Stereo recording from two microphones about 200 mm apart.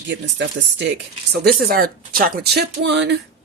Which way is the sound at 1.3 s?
50° right (ahead or behind).